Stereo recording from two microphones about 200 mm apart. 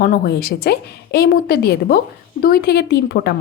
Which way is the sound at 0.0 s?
50° left (ahead or behind).